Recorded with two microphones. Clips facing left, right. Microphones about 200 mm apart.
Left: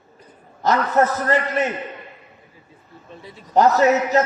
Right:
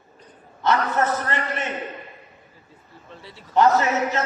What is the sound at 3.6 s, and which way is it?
Speech, 40° left (ahead or behind).